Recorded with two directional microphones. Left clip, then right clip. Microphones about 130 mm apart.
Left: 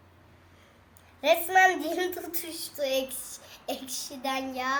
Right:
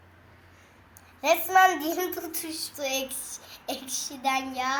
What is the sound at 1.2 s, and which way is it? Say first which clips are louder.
Child singing: right 1 dB; 25° left (ahead or behind).